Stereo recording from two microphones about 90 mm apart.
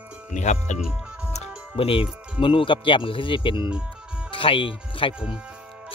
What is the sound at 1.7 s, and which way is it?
Speech, 85° left.